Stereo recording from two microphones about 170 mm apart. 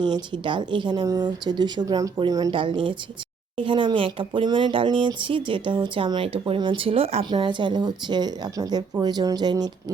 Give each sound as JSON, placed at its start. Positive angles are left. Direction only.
{"t": 0.0, "sound": "speech", "side_deg": -25}